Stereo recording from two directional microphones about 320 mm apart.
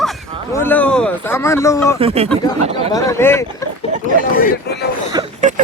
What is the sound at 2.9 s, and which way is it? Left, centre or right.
Speech, centre.